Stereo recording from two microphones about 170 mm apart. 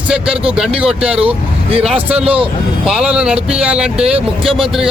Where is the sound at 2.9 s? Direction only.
5° right (ahead or behind).